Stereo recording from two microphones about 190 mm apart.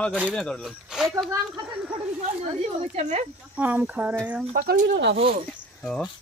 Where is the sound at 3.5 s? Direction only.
10° right (ahead or behind).